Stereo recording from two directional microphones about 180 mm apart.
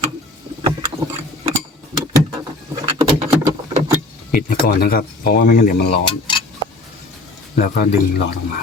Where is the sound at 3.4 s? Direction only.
15° right (ahead or behind).